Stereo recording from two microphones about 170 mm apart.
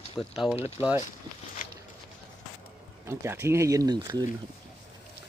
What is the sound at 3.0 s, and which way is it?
Speech, 15° right (ahead or behind).